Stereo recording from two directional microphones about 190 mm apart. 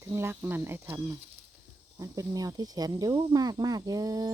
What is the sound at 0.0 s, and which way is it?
Speech, 15° right (ahead or behind).